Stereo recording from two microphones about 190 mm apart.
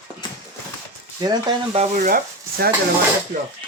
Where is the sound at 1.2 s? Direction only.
25° right (ahead or behind).